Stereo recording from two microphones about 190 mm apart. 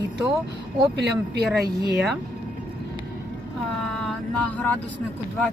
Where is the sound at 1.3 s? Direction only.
55° right (ahead or behind).